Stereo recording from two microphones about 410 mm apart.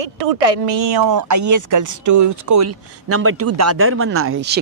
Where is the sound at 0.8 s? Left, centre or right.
Right.